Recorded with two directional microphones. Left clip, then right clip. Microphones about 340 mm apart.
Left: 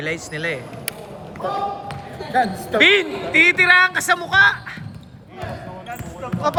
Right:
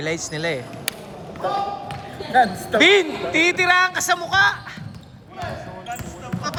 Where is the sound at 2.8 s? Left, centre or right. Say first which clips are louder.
Left 1 dB; centre.